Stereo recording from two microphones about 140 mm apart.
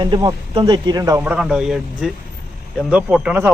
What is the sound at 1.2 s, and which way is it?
A man's voice, 5° right (ahead or behind).